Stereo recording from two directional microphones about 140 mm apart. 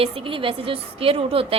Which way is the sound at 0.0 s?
40° right (ahead or behind).